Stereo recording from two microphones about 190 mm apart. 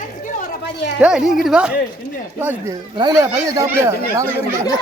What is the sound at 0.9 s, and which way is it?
Speech, 5° right (ahead or behind).